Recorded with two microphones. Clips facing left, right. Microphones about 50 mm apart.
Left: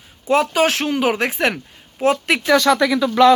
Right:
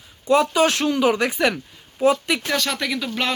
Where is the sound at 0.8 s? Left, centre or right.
Left.